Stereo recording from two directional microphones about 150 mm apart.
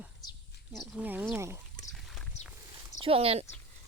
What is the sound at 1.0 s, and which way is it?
Speech, 10° right (ahead or behind).